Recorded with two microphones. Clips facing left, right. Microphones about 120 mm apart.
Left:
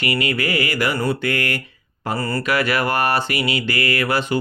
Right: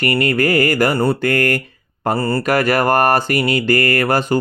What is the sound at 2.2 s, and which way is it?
Speech, 25° right (ahead or behind).